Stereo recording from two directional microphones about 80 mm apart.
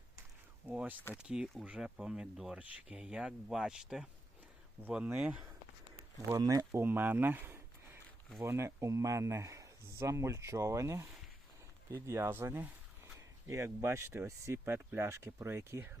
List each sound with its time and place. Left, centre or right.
0.7 s speech: centre
4.8 s speech: right
6.3 s speech: right
6.7 s speech: right